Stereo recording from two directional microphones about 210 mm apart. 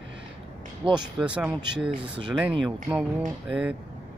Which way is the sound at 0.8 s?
25° right (ahead or behind).